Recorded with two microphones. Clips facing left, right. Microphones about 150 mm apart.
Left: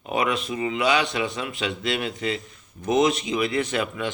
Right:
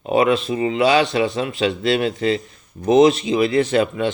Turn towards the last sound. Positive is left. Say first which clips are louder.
# right 8 dB
turn(degrees=-30)  # may be behind; listen again after turning